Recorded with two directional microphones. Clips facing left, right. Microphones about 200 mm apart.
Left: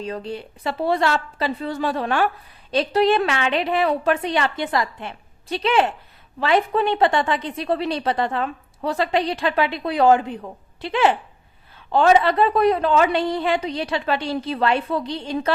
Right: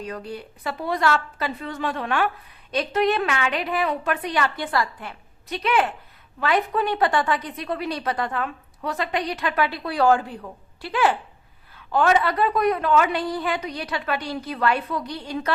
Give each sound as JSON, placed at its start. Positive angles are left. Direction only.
{"t": 0.0, "sound": "a woman's voice", "side_deg": 25}